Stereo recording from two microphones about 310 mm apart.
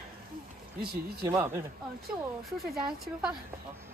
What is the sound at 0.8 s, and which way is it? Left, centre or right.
Speech, right.